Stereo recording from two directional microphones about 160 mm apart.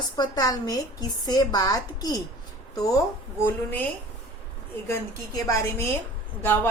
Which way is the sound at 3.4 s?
10° left (ahead or behind).